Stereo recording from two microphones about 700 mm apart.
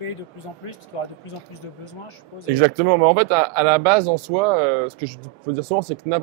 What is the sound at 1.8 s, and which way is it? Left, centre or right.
Speech, left.